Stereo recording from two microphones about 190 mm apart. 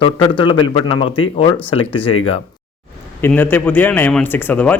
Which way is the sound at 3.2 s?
10° left (ahead or behind).